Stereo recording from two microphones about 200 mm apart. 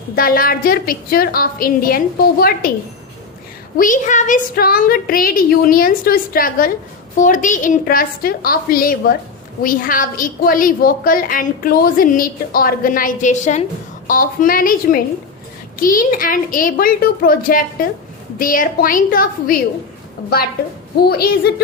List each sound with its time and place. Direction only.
0.2 s a woman's voice: 45° left (ahead or behind)
3.8 s a woman's voice: 40° left (ahead or behind)
21.0 s a woman's voice: 50° left (ahead or behind)